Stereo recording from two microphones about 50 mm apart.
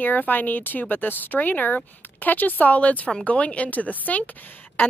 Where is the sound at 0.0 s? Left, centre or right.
Left.